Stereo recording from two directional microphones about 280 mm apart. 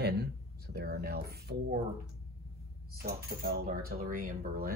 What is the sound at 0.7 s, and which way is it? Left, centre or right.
Speech, right.